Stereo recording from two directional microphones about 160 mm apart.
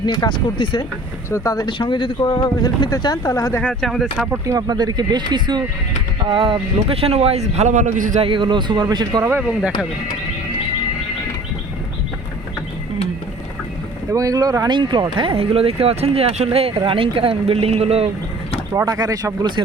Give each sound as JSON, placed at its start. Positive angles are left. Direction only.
{"t": 0.0, "sound": "speech", "side_deg": 25}
{"t": 3.6, "sound": "speech", "side_deg": 5}
{"t": 4.4, "sound": "speech", "side_deg": -25}
{"t": 8.2, "sound": "speech", "side_deg": -30}
{"t": 9.4, "sound": "speech", "side_deg": -5}
{"t": 14.1, "sound": "speech", "side_deg": -20}
{"t": 18.8, "sound": "speech", "side_deg": -25}